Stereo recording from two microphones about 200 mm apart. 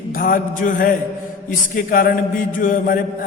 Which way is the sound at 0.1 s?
45° left (ahead or behind).